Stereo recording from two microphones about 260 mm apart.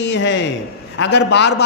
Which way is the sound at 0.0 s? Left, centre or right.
Left.